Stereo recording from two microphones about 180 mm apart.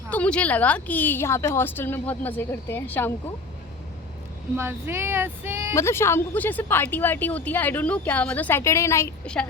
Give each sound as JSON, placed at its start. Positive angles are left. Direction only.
{"t": 0.1, "sound": "speech", "side_deg": 5}
{"t": 4.5, "sound": "speech", "side_deg": -15}
{"t": 5.7, "sound": "speech", "side_deg": 15}